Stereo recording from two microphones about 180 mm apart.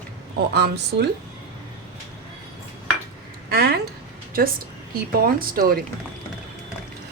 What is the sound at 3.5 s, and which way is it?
Speech, 60° right (ahead or behind).